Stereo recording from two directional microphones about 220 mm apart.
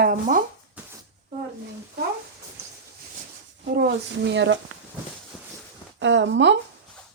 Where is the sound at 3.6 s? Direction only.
45° right (ahead or behind).